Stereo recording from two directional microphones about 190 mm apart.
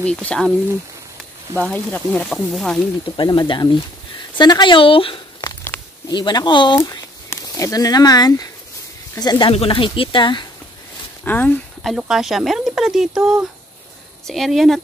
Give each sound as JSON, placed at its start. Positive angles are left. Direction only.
{"t": 0.0, "sound": "speech", "side_deg": 5}
{"t": 1.6, "sound": "speech", "side_deg": 5}
{"t": 3.2, "sound": "speech", "side_deg": 25}
{"t": 5.6, "sound": "a sound", "side_deg": 10}
{"t": 6.1, "sound": "speech", "side_deg": 25}
{"t": 11.2, "sound": "speech", "side_deg": 10}